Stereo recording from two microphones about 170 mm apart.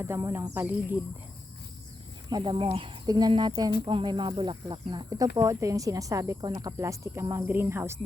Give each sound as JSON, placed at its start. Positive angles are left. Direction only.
{"t": 0.0, "sound": "speech", "side_deg": -15}
{"t": 2.3, "sound": "speech", "side_deg": -30}